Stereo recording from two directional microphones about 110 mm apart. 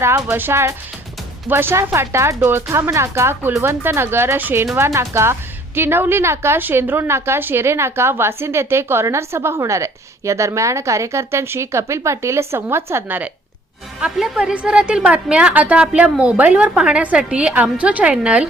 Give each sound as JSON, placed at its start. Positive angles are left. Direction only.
{"t": 0.0, "sound": "a woman's voice", "side_deg": -20}
{"t": 14.0, "sound": "a woman's voice", "side_deg": -5}